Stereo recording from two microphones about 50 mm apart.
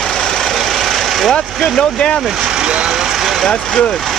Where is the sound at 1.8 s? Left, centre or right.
Centre.